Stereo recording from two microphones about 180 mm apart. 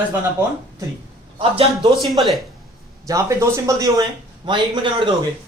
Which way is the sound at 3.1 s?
15° right (ahead or behind).